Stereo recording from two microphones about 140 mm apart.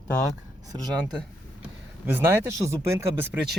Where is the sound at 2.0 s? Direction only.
15° right (ahead or behind).